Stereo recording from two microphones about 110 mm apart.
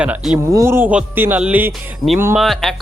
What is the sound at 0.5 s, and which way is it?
Speech, 25° right (ahead or behind).